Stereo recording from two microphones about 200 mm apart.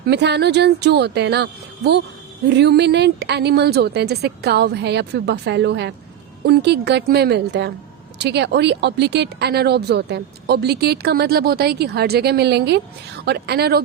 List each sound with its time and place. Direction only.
0.1 s speech: 60° right (ahead or behind)